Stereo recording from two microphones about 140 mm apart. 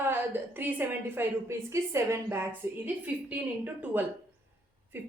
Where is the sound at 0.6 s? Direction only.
15° right (ahead or behind).